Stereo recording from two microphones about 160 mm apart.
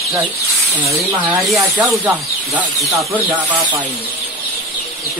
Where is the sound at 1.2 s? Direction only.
5° right (ahead or behind).